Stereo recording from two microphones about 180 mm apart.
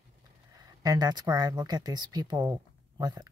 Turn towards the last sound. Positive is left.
turn(degrees=-20)  # may be behind; listen again after turning